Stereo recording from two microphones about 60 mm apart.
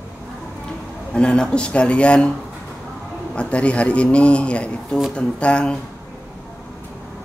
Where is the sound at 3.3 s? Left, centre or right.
Centre.